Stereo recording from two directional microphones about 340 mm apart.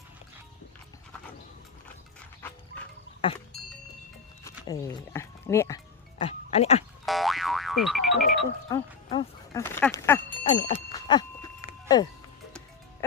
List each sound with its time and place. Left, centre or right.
3.2 s music: centre
4.4 s speech: centre
7.0 s boing: centre
8.7 s a sound: centre